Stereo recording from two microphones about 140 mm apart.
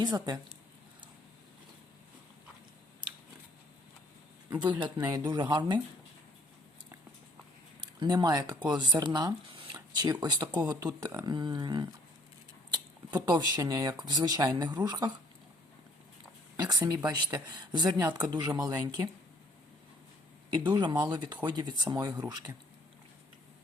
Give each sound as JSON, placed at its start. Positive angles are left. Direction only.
{"t": 0.0, "sound": "speech", "side_deg": -30}
{"t": 4.6, "sound": "speech", "side_deg": -35}
{"t": 7.9, "sound": "speech", "side_deg": -30}
{"t": 16.6, "sound": "speech", "side_deg": -30}
{"t": 20.7, "sound": "speech", "side_deg": -30}